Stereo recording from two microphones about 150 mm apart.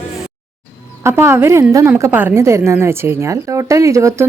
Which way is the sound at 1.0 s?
15° right (ahead or behind).